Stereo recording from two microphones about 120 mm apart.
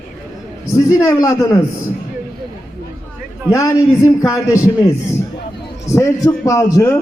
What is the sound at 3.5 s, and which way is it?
A man's voice, 25° left (ahead or behind).